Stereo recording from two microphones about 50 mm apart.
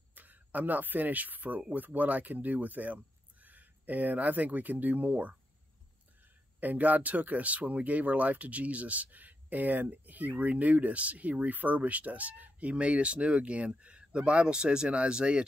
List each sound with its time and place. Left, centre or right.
0.1 s speech: right
6.6 s speech: right